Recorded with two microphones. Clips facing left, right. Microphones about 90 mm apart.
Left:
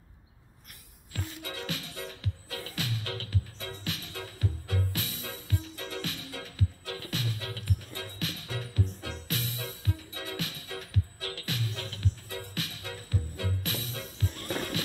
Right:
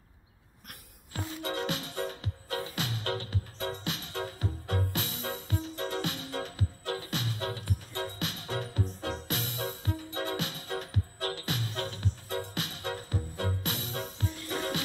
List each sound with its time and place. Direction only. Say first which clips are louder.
1.1 s music: right 5 dB; 30° right (ahead or behind)